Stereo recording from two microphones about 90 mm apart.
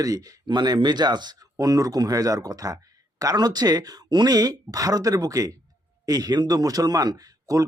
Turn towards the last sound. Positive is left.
turn(degrees=-40)  # may be behind; listen again after turning